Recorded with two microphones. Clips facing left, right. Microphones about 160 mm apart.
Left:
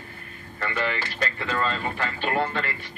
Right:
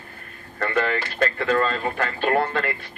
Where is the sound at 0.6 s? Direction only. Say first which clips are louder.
Right 5 dB; 50° right (ahead or behind).